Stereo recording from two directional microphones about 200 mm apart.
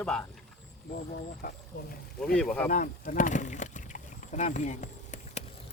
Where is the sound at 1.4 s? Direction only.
45° left (ahead or behind).